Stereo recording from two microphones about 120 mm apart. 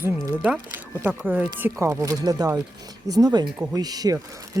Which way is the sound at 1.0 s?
15° right (ahead or behind).